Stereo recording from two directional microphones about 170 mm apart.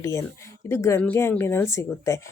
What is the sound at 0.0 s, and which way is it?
Speech, 15° left (ahead or behind).